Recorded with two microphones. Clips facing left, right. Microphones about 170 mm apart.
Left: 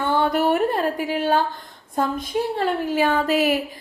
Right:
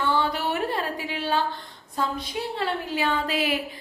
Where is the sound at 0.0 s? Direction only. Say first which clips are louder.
Left 5 dB; 50° left (ahead or behind).